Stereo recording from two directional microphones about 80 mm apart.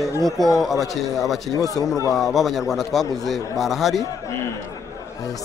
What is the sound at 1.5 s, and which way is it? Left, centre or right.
Speech, left.